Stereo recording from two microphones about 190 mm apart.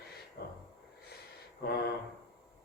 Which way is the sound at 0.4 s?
55° left (ahead or behind).